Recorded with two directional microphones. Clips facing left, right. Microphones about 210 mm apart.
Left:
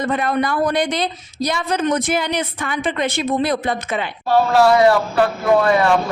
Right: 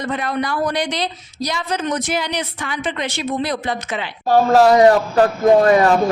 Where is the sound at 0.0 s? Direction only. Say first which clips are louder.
Left 3 dB; 50° left (ahead or behind).